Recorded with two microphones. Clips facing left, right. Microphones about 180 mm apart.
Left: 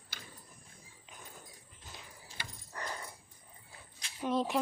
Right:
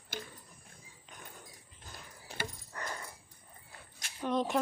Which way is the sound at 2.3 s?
65° right (ahead or behind).